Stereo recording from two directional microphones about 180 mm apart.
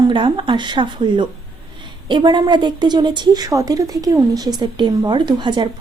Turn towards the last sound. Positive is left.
turn(degrees=-25)  # may be behind; listen again after turning